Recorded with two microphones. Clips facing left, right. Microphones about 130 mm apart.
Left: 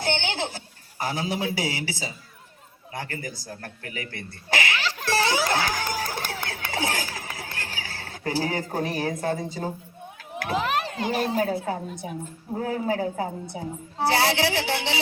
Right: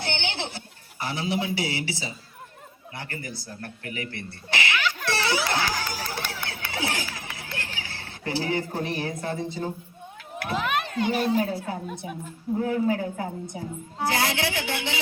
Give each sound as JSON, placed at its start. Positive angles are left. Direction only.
{"t": 0.0, "sound": "a man's voice", "side_deg": 40}
{"t": 12.5, "sound": "a woman's voice", "side_deg": 35}